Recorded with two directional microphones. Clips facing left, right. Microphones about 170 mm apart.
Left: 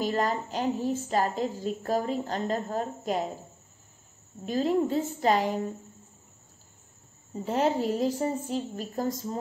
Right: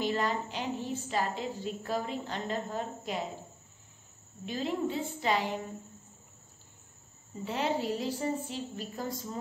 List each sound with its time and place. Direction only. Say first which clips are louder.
0.0 s a woman's voice: left 3 dB; 40° left (ahead or behind)
4.5 s a woman's voice: left 7 dB; 40° left (ahead or behind)
7.3 s a woman's voice: left 6 dB; 45° left (ahead or behind)